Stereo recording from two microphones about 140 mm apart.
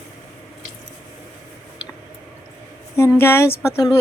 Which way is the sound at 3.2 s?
15° left (ahead or behind).